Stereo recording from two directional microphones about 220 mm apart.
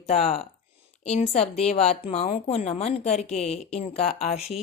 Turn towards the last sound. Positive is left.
turn(degrees=30)  # may be behind; listen again after turning